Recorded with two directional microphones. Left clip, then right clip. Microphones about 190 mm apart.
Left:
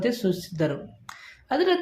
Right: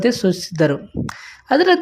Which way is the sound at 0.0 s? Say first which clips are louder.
Right 8 dB; 40° right (ahead or behind).